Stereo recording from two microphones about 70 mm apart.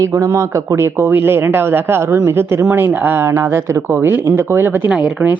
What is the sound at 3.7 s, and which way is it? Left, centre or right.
Speech, right.